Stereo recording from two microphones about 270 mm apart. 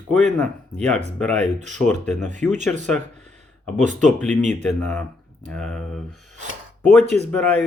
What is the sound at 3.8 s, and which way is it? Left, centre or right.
Speech, right.